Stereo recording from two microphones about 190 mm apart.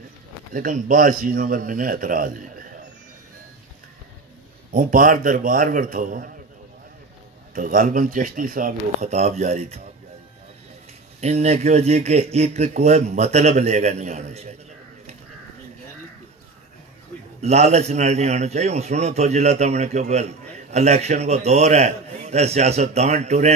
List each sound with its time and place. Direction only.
0.5 s speech: 45° right (ahead or behind)
4.7 s speech: 45° right (ahead or behind)
7.5 s speech: 45° right (ahead or behind)
11.1 s speech: 35° right (ahead or behind)
17.4 s speech: 35° right (ahead or behind)